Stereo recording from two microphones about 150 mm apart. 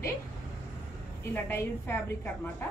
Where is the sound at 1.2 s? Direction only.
15° left (ahead or behind).